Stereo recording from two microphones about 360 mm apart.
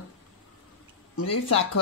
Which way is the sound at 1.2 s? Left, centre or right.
Left.